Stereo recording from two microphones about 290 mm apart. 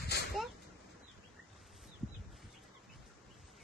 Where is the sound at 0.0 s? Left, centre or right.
Left.